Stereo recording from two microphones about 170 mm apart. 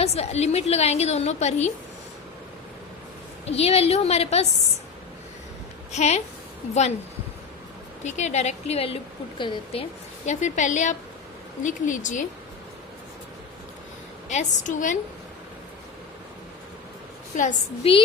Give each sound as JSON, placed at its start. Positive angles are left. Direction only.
{"t": 0.0, "sound": "a woman's voice", "side_deg": 40}
{"t": 3.4, "sound": "a woman's voice", "side_deg": 35}
{"t": 5.9, "sound": "a woman's voice", "side_deg": 40}
{"t": 8.0, "sound": "a woman's voice", "side_deg": 40}
{"t": 10.2, "sound": "a woman's voice", "side_deg": 45}
{"t": 14.3, "sound": "a woman's voice", "side_deg": 45}
{"t": 17.3, "sound": "a woman's voice", "side_deg": 50}
{"t": 17.8, "sound": "a woman's voice", "side_deg": 35}